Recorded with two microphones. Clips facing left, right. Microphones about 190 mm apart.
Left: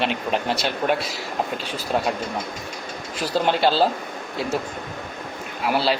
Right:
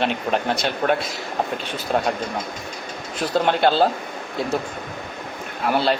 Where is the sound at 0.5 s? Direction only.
5° left (ahead or behind).